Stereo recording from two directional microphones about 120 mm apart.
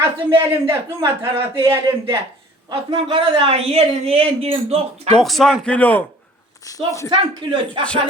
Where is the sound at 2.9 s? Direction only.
45° right (ahead or behind).